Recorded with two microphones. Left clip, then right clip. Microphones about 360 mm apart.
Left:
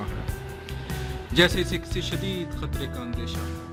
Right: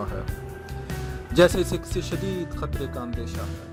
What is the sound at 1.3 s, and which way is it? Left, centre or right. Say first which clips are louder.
Speech: right 3 dB; centre.